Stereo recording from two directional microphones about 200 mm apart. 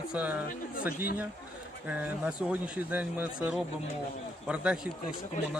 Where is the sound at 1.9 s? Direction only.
10° right (ahead or behind).